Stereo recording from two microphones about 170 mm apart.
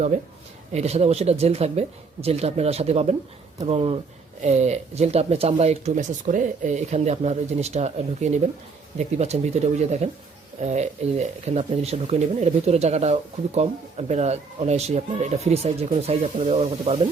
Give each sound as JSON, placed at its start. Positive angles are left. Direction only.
{"t": 0.7, "sound": "speech", "side_deg": -40}